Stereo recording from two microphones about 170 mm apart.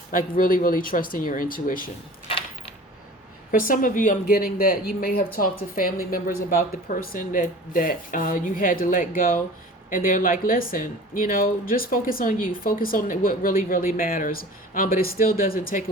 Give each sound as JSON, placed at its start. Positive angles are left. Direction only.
{"t": 0.1, "sound": "speech", "side_deg": 55}
{"t": 3.5, "sound": "speech", "side_deg": 55}